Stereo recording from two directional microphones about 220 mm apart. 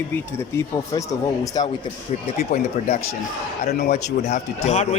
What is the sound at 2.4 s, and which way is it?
Speech, 40° left (ahead or behind).